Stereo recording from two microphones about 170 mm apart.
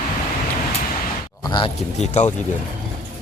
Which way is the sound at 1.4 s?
30° left (ahead or behind).